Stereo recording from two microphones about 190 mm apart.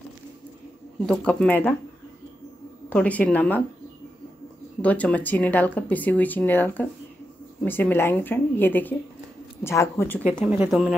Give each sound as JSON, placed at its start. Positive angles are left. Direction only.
{"t": 1.0, "sound": "speech", "side_deg": 5}
{"t": 2.9, "sound": "speech", "side_deg": 5}
{"t": 4.8, "sound": "speech", "side_deg": 10}
{"t": 10.3, "sound": "speech", "side_deg": -5}